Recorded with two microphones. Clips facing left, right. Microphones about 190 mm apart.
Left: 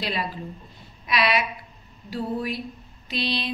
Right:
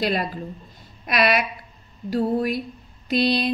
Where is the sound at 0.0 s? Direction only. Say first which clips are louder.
Right 5 dB; 50° right (ahead or behind).